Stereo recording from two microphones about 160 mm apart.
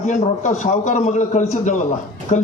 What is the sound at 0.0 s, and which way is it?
A man's voice, 50° left (ahead or behind).